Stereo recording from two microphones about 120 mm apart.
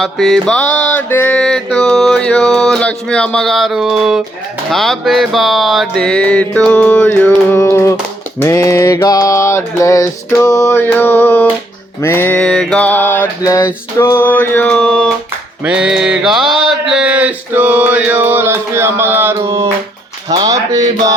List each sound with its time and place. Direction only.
0.0 s mantra: centre (ahead or behind)
4.7 s music: centre (ahead or behind); by 7.9 s 25° left (ahead or behind)
8.4 s a sound: 25° left (ahead or behind)
11.9 s music: 20° left (ahead or behind); by 15.1 s 5° left (ahead or behind)
15.6 s mantra: 5° right (ahead or behind); by 19.6 s 25° right (ahead or behind)
20.3 s music: 35° right (ahead or behind)